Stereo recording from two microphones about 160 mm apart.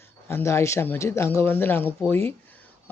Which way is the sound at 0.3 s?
15° left (ahead or behind).